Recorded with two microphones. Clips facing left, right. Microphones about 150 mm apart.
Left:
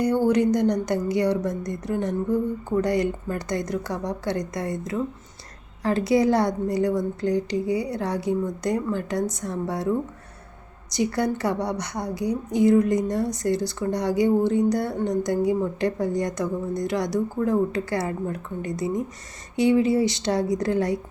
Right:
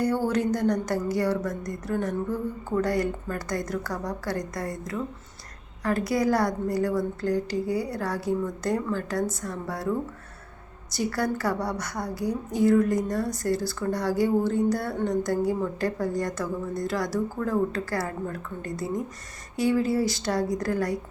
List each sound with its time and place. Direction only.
0.0 s speech: 15° left (ahead or behind)
10.9 s speech: 20° left (ahead or behind)